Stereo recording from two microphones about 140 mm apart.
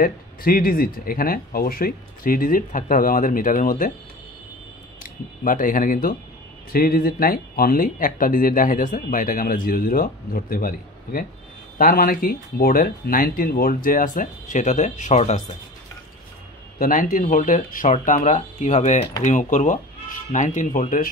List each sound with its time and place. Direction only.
0.0 s speech: 90° left
5.4 s speech: 75° left (ahead or behind); by 15.4 s 55° left (ahead or behind)
16.7 s speech: 85° left; by 19.0 s 55° left (ahead or behind)
19.2 s speech: 65° left (ahead or behind)